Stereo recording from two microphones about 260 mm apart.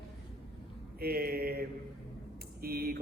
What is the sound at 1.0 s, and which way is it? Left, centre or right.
A man's voice, right.